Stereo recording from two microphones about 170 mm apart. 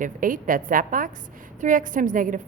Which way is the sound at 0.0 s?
55° right (ahead or behind).